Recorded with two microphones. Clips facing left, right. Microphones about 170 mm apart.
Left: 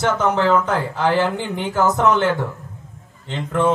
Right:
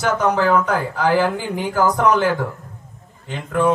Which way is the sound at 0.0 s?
25° left (ahead or behind).